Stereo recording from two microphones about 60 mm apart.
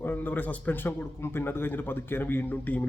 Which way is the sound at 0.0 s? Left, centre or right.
Left.